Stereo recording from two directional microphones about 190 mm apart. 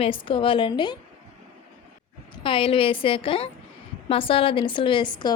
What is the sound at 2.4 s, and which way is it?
A woman's voice, 25° left (ahead or behind).